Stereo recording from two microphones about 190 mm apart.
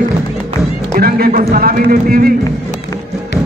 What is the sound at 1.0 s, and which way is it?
A man's voice, 50° right (ahead or behind).